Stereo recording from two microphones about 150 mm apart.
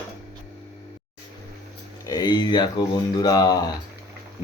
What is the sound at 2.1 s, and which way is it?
Speech, 25° left (ahead or behind).